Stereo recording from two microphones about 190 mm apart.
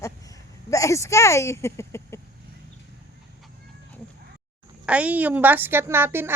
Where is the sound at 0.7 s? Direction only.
15° left (ahead or behind).